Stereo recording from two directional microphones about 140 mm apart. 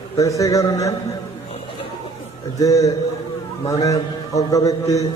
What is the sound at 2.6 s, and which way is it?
A man's voice, 25° left (ahead or behind).